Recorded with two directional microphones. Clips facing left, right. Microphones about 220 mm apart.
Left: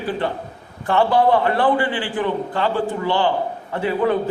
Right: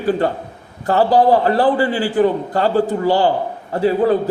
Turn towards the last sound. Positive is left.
turn(degrees=-35)  # may be behind; listen again after turning